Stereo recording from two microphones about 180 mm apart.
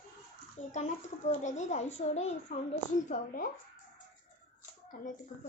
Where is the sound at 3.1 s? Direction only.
50° left (ahead or behind).